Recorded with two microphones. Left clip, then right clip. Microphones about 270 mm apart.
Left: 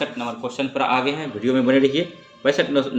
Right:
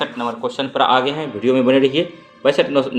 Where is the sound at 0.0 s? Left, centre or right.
Right.